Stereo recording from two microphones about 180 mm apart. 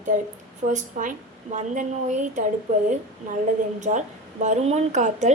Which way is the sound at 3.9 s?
40° right (ahead or behind).